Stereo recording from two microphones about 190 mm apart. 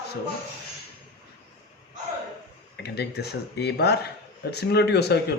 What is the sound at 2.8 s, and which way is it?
Speech, 60° left (ahead or behind).